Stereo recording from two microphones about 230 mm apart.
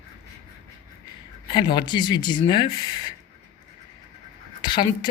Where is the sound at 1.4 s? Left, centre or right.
Centre.